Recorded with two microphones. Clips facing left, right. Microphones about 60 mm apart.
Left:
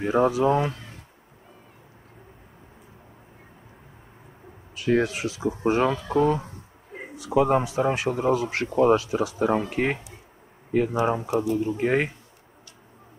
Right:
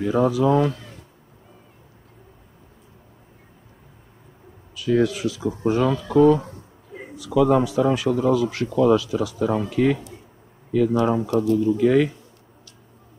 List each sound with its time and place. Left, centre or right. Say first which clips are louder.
0.0 s speech: right 1 dB; left
4.7 s speech: right 2 dB; left
11.1 s speech: right 4 dB; left
11.5 s speech: right 8 dB; left